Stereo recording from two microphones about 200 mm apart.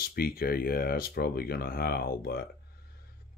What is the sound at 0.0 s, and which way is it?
Speech, 50° left (ahead or behind).